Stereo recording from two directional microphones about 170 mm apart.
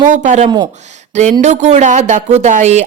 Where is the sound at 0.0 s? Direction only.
45° right (ahead or behind).